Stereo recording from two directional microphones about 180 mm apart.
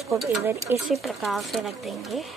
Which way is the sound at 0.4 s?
15° right (ahead or behind).